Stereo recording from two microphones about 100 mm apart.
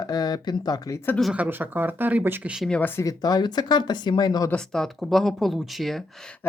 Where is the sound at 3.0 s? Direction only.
40° left (ahead or behind).